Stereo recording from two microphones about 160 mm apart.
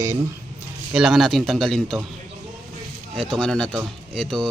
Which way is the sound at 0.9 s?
5° right (ahead or behind).